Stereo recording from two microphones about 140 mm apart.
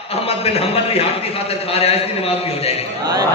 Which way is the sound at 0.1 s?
45° left (ahead or behind).